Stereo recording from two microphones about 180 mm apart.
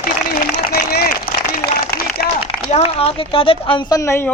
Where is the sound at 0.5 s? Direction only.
55° left (ahead or behind).